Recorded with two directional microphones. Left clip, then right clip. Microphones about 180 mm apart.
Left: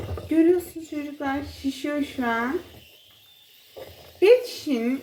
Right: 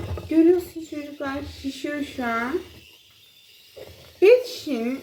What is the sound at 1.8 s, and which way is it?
Speech, 15° right (ahead or behind).